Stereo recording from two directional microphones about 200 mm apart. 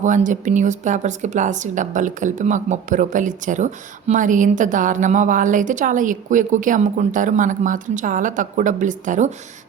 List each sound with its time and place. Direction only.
0.0 s speech: 40° right (ahead or behind)